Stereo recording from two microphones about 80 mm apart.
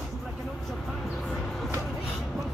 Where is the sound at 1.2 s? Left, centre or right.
Centre.